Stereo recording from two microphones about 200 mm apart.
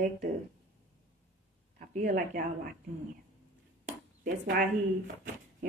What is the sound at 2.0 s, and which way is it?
Speech, 45° right (ahead or behind).